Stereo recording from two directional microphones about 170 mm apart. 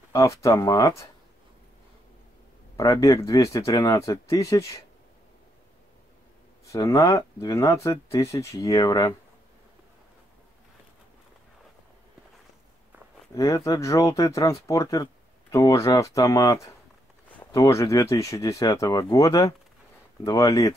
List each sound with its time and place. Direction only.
0.1 s speech: 15° left (ahead or behind)
2.8 s speech: 20° left (ahead or behind)
6.6 s speech: 20° left (ahead or behind)
13.3 s speech: 20° left (ahead or behind)